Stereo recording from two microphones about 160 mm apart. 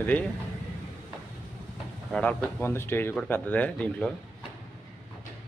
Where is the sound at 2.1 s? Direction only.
10° left (ahead or behind).